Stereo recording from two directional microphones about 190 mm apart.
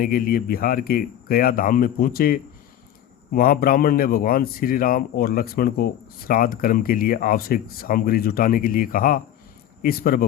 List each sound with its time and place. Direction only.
0.0 s a man's voice: 50° left (ahead or behind)